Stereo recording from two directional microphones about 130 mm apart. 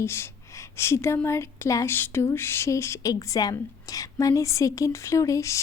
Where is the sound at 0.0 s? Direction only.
20° left (ahead or behind).